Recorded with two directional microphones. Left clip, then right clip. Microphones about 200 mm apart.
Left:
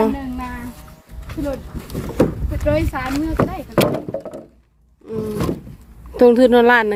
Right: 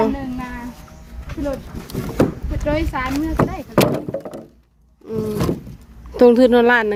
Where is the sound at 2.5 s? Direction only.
30° left (ahead or behind).